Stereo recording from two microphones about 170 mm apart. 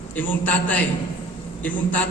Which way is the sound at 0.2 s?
10° left (ahead or behind).